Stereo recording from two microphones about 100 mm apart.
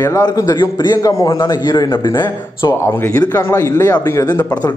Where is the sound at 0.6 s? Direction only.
45° left (ahead or behind).